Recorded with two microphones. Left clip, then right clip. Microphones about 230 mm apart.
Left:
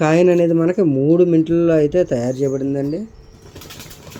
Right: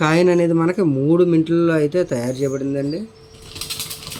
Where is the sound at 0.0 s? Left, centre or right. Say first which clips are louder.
Left 2 dB; centre.